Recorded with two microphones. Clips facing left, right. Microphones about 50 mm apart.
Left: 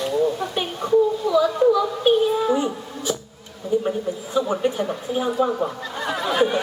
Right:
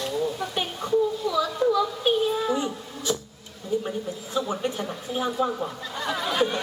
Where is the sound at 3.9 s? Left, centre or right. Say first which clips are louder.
Left 6 dB; left.